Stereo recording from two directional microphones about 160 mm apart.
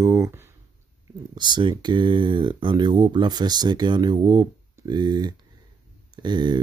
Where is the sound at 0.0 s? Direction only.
20° right (ahead or behind).